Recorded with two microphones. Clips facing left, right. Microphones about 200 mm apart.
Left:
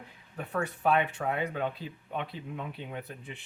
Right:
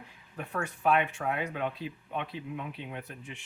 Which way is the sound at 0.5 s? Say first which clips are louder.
Even; 35° left (ahead or behind).